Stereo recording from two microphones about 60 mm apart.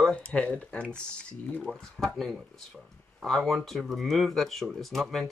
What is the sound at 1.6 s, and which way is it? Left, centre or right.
Speech, centre.